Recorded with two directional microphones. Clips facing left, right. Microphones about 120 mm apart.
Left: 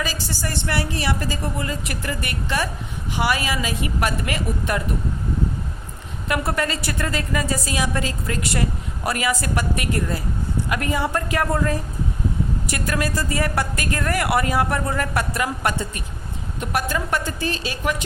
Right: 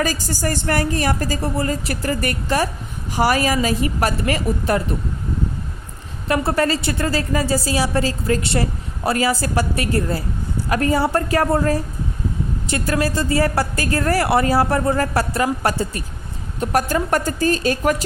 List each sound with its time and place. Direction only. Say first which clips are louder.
0.0 s a woman's voice: right 6 dB; 45° right (ahead or behind)
6.2 s a woman's voice: right 5 dB; 30° right (ahead or behind); by 17.9 s 45° right (ahead or behind)